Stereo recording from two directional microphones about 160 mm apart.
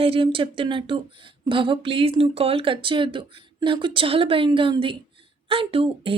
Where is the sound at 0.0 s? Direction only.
35° right (ahead or behind).